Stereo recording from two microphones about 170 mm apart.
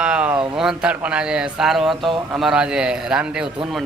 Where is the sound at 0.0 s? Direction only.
5° right (ahead or behind).